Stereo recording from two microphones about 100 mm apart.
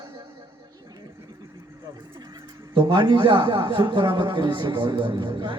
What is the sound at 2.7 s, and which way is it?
A man's voice, 45° right (ahead or behind).